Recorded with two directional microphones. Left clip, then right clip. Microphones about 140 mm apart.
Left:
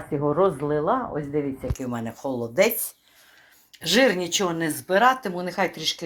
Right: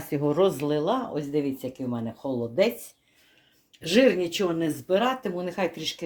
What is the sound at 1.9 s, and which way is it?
Speech, 5° left (ahead or behind).